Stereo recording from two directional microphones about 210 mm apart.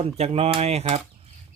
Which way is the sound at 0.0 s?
30° right (ahead or behind).